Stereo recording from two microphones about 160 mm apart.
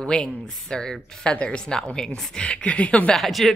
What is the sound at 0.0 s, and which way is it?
Speech, 5° left (ahead or behind).